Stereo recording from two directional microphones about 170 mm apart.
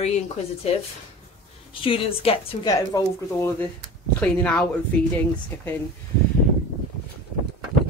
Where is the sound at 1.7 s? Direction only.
30° left (ahead or behind).